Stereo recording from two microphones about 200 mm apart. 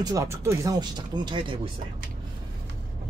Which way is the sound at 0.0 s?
15° right (ahead or behind).